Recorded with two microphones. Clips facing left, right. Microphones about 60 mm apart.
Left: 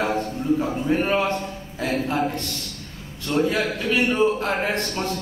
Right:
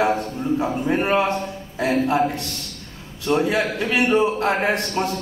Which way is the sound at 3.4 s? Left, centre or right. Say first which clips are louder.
Left 1 dB; centre.